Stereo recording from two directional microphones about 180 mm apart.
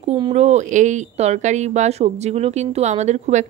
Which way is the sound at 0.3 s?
40° right (ahead or behind).